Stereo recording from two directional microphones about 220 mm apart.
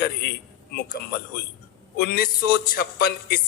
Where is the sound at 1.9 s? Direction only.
40° left (ahead or behind).